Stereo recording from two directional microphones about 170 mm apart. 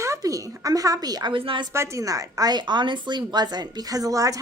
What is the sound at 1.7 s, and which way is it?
A woman's voice, 15° right (ahead or behind).